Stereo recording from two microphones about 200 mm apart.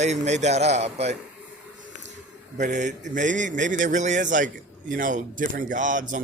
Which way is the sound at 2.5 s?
35° right (ahead or behind).